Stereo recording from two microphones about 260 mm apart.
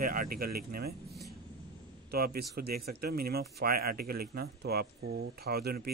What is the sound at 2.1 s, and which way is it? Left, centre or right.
A man's voice, right.